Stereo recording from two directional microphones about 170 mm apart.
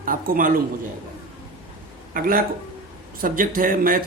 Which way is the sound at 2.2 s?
55° right (ahead or behind).